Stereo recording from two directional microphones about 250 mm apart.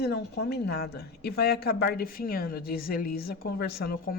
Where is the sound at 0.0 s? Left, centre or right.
Left.